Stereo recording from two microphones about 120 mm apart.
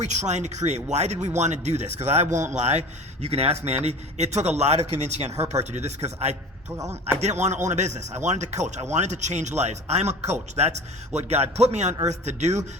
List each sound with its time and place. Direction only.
0.0 s a man's voice: 75° right (ahead or behind)